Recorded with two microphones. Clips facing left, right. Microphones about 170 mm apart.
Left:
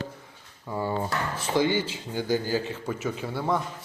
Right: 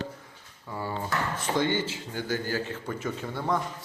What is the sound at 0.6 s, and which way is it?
Speech, 20° left (ahead or behind).